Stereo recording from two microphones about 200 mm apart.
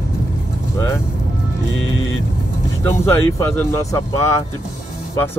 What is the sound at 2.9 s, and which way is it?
Speech, 10° left (ahead or behind).